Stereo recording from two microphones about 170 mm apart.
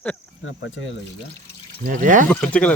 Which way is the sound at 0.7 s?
90° left.